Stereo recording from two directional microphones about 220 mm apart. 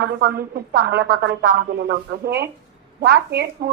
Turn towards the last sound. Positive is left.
turn(degrees=-50)  # may be behind; listen again after turning